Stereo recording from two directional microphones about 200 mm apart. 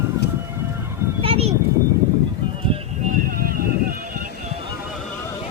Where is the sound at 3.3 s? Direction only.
45° right (ahead or behind).